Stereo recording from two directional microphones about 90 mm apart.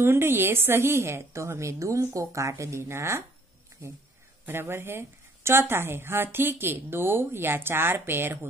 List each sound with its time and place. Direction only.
0.0 s a woman's voice: 25° right (ahead or behind)
4.5 s speech: 25° right (ahead or behind)